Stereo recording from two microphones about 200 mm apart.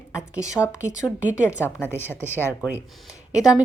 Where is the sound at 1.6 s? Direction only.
10° left (ahead or behind).